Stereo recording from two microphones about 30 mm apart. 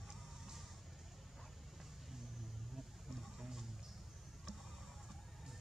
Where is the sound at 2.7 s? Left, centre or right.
Centre.